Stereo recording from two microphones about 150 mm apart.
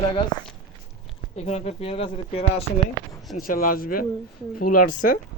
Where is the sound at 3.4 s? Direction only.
70° left (ahead or behind).